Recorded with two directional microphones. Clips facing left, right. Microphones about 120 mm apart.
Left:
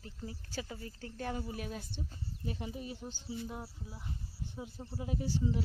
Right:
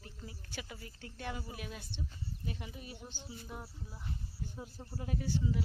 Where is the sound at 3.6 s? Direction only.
10° left (ahead or behind).